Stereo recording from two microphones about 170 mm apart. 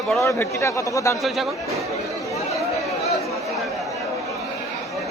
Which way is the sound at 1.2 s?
Centre (ahead or behind).